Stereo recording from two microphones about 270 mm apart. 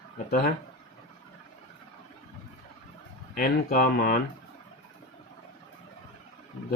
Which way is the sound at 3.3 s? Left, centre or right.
Left.